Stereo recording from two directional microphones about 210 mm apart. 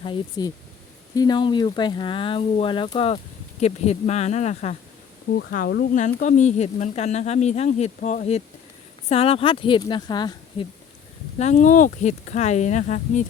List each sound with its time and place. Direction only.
0.0 s speech: 20° left (ahead or behind)
5.4 s speech: 50° left (ahead or behind); by 10.7 s 20° left (ahead or behind)
11.3 s speech: 35° left (ahead or behind)